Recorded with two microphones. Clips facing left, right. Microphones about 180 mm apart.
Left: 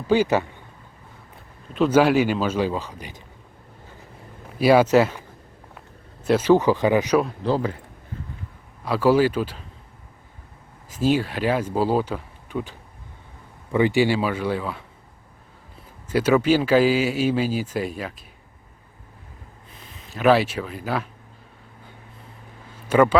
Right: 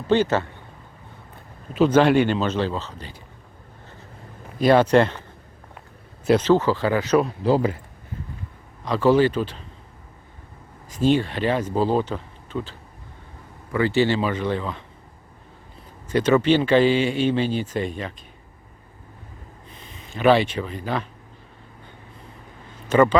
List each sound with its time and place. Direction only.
0.1 s speech: 10° left (ahead or behind)
1.9 s speech: 5° left (ahead or behind)
4.4 s speech: 5° left (ahead or behind)
6.2 s speech: 5° left (ahead or behind)
6.5 s speech: 15° left (ahead or behind)
7.2 s speech: centre (ahead or behind)
7.5 s speech: 10° right (ahead or behind)
8.8 s speech: 10° left (ahead or behind)
10.8 s speech: 5° left (ahead or behind)
13.7 s speech: 15° left (ahead or behind)
16.0 s speech: 10° left (ahead or behind)
19.7 s speech: centre (ahead or behind)
22.9 s a man's voice: 10° left (ahead or behind)